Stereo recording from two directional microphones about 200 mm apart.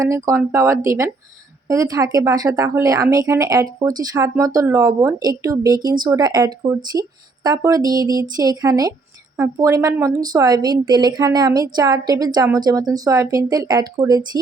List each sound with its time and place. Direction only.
0.0 s a woman's voice: 15° right (ahead or behind)